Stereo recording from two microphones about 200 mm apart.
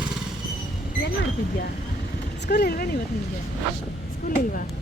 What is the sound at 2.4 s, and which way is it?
Speech, 55° left (ahead or behind).